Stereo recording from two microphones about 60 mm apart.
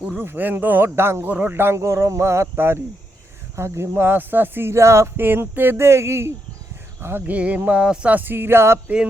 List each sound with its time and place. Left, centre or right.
0.2 s speech: right
1.3 s a sound: right
1.5 s speech: right
1.8 s speech: right
7.3 s a sound: right
8.1 s speech: right